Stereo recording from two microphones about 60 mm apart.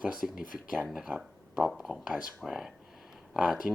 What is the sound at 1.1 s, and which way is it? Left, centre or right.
Speech, right.